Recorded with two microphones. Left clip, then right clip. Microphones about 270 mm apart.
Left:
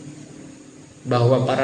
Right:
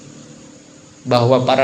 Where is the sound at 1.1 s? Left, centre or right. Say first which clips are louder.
Right 5 dB; right.